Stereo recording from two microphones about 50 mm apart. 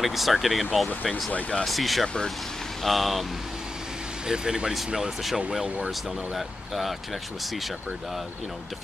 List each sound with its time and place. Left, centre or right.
0.0 s speech: centre
4.3 s speech: centre